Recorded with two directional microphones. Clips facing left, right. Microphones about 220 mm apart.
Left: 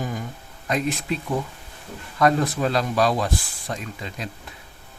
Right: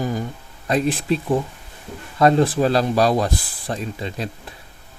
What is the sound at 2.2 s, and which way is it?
Speech, 30° right (ahead or behind).